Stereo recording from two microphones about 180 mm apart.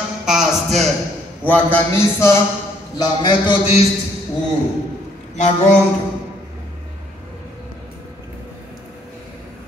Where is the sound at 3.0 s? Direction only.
25° left (ahead or behind).